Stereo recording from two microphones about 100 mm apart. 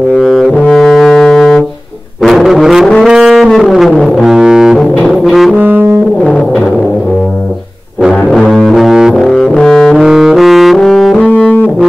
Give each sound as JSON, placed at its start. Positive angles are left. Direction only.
{"t": 0.1, "sound": "brass instrument", "side_deg": 0}
{"t": 2.2, "sound": "music", "side_deg": 0}
{"t": 5.0, "sound": "brass instrument", "side_deg": 0}
{"t": 5.6, "sound": "music", "side_deg": -20}
{"t": 6.2, "sound": "music", "side_deg": 5}
{"t": 8.1, "sound": "music", "side_deg": 5}
{"t": 11.2, "sound": "music", "side_deg": 15}